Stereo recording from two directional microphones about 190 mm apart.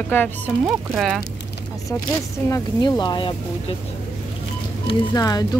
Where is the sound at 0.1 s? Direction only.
10° left (ahead or behind).